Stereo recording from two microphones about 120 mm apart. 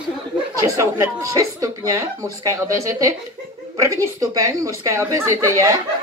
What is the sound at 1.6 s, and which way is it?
Speech, 25° right (ahead or behind).